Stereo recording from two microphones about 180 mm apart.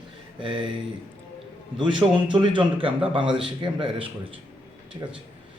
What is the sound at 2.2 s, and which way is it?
A man's voice, 25° right (ahead or behind).